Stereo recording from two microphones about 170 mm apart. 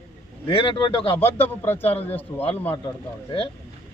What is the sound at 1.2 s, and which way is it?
Speech, 10° left (ahead or behind).